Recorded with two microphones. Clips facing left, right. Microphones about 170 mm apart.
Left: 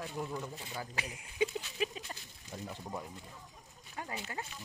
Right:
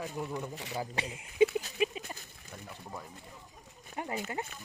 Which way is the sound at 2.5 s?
20° left (ahead or behind).